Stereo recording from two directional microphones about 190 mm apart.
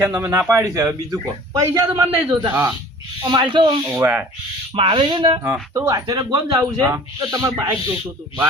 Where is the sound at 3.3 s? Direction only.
25° right (ahead or behind).